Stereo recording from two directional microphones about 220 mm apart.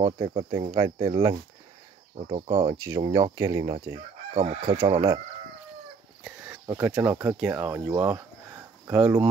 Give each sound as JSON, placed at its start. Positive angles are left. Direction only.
{"t": 0.0, "sound": "speech", "side_deg": -25}
{"t": 4.3, "sound": "speech", "side_deg": -30}
{"t": 6.2, "sound": "a sound", "side_deg": -5}
{"t": 6.8, "sound": "speech", "side_deg": -10}